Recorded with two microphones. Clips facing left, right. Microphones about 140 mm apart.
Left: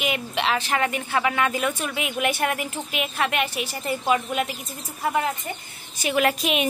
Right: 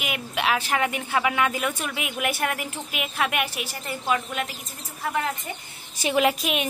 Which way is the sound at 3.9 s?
10° left (ahead or behind).